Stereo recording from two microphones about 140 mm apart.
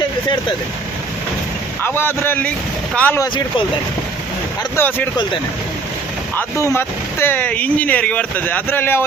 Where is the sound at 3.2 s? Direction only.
30° left (ahead or behind).